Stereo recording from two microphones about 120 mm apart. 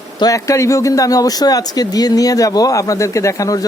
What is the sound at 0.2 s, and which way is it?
Speech, 30° left (ahead or behind).